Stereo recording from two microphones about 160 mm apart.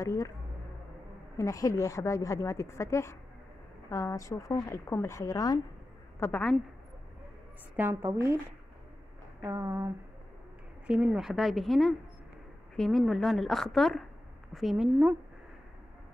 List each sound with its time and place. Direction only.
0.0 s a woman's voice: 20° left (ahead or behind)
1.3 s a woman's voice: 20° left (ahead or behind)
6.1 s a woman's voice: 10° left (ahead or behind)
7.7 s speech: 15° right (ahead or behind)
9.4 s speech: 15° right (ahead or behind)
10.9 s a woman's voice: 5° right (ahead or behind)